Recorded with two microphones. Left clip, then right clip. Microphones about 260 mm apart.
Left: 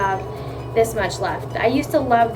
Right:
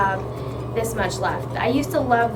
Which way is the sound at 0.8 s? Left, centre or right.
Centre.